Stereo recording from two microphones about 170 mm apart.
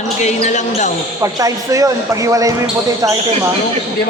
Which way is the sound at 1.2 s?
20° right (ahead or behind).